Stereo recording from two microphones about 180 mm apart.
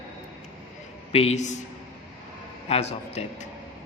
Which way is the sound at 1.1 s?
35° left (ahead or behind).